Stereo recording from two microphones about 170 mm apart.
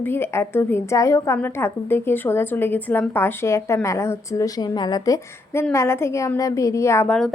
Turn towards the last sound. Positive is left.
turn(degrees=10)  # may be behind; listen again after turning